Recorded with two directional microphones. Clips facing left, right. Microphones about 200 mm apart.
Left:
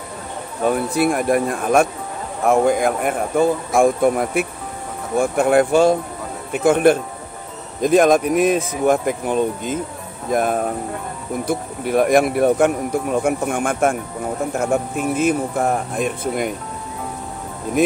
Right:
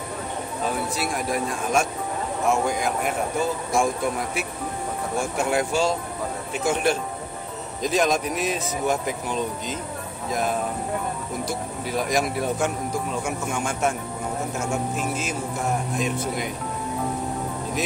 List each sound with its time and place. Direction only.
0.7 s speech: 55° left (ahead or behind)
17.8 s speech: 55° left (ahead or behind)